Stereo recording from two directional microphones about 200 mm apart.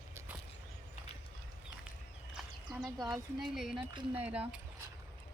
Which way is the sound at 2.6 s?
20° right (ahead or behind).